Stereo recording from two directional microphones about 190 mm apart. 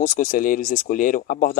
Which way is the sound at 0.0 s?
40° left (ahead or behind).